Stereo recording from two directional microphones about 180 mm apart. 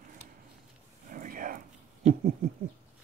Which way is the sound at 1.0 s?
50° right (ahead or behind).